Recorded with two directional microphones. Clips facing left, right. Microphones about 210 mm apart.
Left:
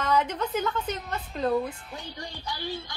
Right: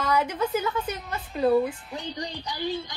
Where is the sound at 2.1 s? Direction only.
20° right (ahead or behind).